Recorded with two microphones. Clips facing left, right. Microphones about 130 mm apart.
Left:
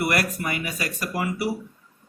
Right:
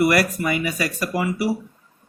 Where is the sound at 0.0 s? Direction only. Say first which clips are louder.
Right 6 dB; 90° right.